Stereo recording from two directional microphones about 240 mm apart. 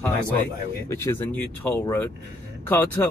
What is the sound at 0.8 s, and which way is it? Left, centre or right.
Speech, centre.